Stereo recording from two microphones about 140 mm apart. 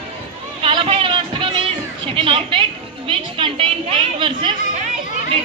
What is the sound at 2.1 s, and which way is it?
A woman's voice, 40° right (ahead or behind).